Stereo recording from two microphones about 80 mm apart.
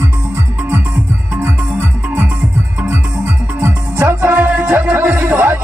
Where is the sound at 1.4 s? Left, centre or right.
Right.